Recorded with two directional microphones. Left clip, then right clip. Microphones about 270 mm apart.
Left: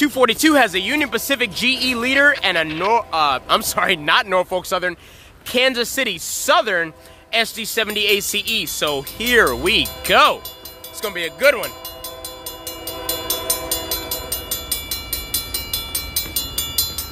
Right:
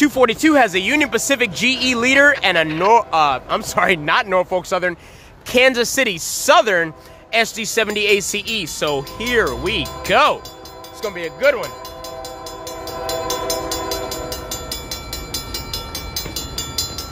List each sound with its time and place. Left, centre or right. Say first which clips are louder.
0.0 s speech: right 1 dB; centre
3.7 s speech: right 4 dB; centre
11.0 s wind chime: left 1 dB; left
13.0 s train: right 3 dB; left